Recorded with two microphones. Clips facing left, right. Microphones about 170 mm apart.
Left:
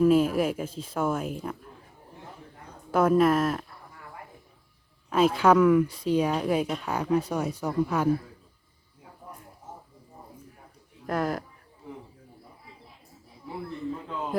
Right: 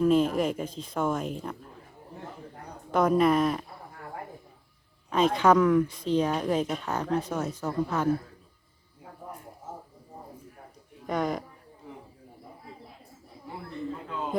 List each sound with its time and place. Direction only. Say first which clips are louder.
0.0 s a woman's voice: left 2 dB; 5° left (ahead or behind)
2.9 s speech: left 1 dB; 5° left (ahead or behind)
5.1 s a woman's voice: left 1 dB; 5° left (ahead or behind)
11.0 s speech: even; centre (ahead or behind)